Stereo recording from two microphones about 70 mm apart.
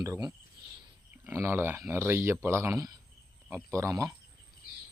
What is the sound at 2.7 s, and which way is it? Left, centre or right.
Speech, right.